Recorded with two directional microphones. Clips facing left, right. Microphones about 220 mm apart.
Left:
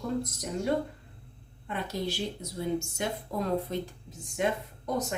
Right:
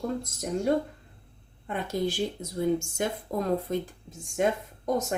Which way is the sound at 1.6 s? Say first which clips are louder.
Right 4 dB; 45° right (ahead or behind).